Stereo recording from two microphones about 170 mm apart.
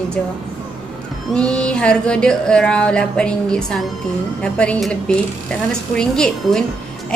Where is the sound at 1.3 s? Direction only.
5° left (ahead or behind).